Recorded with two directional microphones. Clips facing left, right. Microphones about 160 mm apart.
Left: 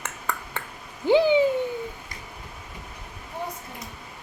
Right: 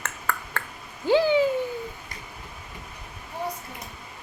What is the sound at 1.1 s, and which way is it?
Bird, 20° left (ahead or behind).